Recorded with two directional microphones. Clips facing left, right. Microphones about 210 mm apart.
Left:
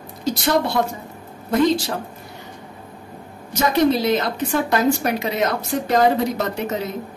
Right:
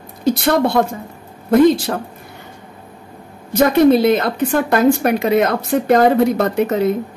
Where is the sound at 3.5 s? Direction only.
55° right (ahead or behind).